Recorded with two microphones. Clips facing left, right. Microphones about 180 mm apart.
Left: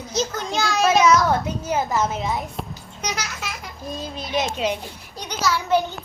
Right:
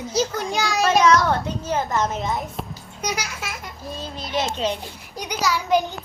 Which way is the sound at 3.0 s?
10° right (ahead or behind).